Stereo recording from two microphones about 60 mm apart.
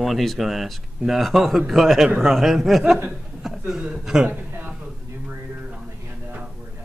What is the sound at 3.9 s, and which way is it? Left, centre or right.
Speech, centre.